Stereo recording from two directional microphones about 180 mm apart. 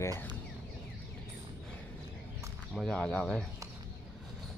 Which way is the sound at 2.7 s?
5° left (ahead or behind).